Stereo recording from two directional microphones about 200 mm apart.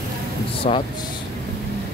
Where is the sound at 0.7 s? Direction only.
35° left (ahead or behind).